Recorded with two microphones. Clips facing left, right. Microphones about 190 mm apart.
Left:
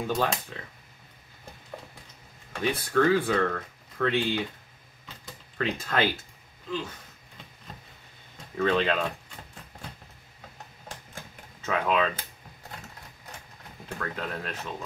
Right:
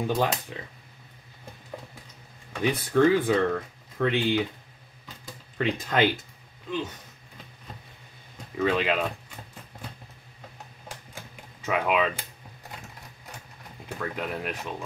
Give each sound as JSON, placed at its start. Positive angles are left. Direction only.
{"t": 0.0, "sound": "speech", "side_deg": -15}
{"t": 2.6, "sound": "speech", "side_deg": -15}
{"t": 5.6, "sound": "speech", "side_deg": -15}
{"t": 8.5, "sound": "speech", "side_deg": -5}
{"t": 11.6, "sound": "speech", "side_deg": -10}
{"t": 13.8, "sound": "speech", "side_deg": -15}